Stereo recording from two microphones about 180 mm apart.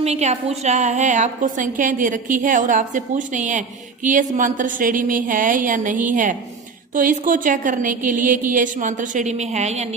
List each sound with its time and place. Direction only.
0.0 s a woman's voice: 35° right (ahead or behind)